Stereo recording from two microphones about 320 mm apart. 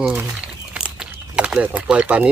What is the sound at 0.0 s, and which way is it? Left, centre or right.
Speech, centre.